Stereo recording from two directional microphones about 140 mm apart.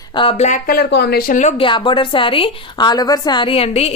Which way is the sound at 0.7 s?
90° left.